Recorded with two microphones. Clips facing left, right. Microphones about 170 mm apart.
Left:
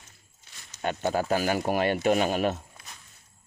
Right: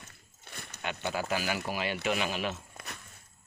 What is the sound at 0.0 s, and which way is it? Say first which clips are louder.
Walk: right 5 dB; 60° right (ahead or behind).